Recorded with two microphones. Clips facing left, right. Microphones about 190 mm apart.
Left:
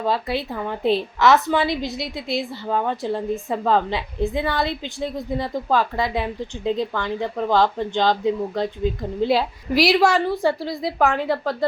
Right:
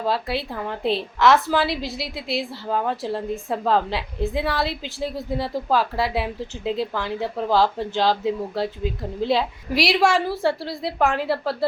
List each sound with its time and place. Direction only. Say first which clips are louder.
0.0 s a woman's voice: left 1 dB; centre (ahead or behind)